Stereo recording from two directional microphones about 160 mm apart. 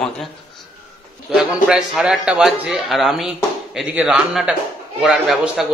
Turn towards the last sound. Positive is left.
turn(degrees=0)  # may be behind; listen again after turning